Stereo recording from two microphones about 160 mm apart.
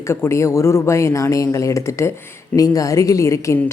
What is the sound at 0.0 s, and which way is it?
A woman's voice, 15° left (ahead or behind).